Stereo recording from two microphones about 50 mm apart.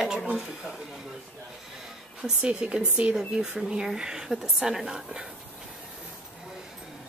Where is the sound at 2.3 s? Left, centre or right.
Right.